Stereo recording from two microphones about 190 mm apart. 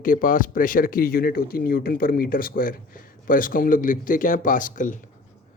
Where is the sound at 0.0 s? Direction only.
45° left (ahead or behind).